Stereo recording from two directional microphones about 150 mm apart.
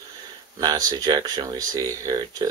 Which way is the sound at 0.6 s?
25° right (ahead or behind).